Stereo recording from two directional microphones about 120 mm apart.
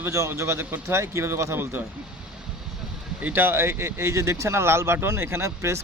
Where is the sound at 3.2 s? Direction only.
20° right (ahead or behind).